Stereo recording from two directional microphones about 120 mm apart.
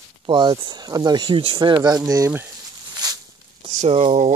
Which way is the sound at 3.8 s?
65° right (ahead or behind).